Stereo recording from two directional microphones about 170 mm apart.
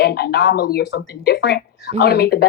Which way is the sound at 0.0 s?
70° left (ahead or behind).